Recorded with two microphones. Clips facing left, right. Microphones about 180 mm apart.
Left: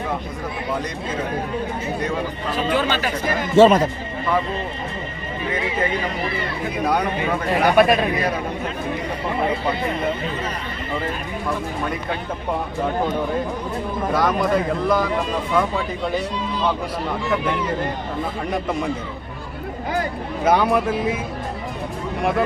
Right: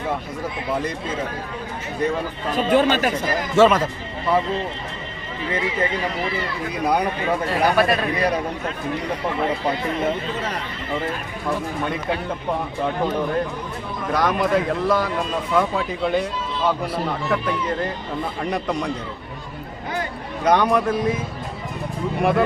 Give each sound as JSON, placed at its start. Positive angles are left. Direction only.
{"t": 2.7, "sound": "speech", "side_deg": -45}
{"t": 3.5, "sound": "speech", "side_deg": 20}
{"t": 7.5, "sound": "speech", "side_deg": 15}
{"t": 14.1, "sound": "a man's voice", "side_deg": 0}
{"t": 18.5, "sound": "a man's voice", "side_deg": 5}
{"t": 20.4, "sound": "a man's voice", "side_deg": 5}
{"t": 22.2, "sound": "a man's voice", "side_deg": 0}